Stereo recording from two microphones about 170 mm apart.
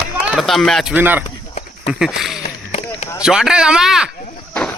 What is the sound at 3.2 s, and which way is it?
Speech, 5° right (ahead or behind).